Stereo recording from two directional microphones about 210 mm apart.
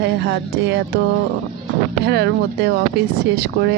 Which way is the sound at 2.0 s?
55° right (ahead or behind).